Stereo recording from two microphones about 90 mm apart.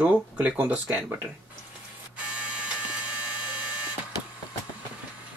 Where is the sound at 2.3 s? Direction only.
15° right (ahead or behind).